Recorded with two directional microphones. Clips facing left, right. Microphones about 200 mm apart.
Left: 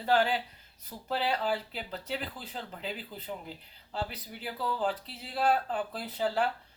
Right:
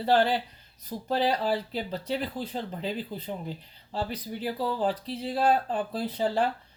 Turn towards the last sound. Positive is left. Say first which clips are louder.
# right 4 dB
turn(degrees=-35)  # may be behind; listen again after turning